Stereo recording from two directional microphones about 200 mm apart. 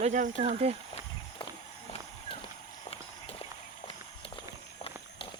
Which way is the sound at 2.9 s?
30° left (ahead or behind).